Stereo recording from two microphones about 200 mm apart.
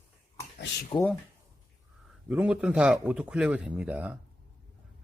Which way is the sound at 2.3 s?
5° right (ahead or behind).